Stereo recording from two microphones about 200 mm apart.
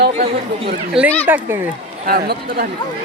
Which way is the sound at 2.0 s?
50° right (ahead or behind).